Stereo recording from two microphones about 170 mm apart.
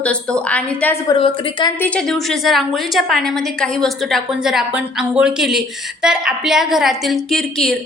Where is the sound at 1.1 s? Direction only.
30° left (ahead or behind).